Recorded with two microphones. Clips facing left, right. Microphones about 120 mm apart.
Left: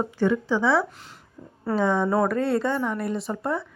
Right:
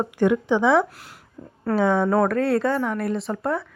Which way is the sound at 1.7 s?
5° right (ahead or behind).